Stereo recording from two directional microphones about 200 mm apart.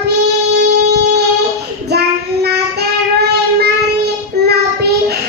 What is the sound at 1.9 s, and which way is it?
Child singing, 55° right (ahead or behind).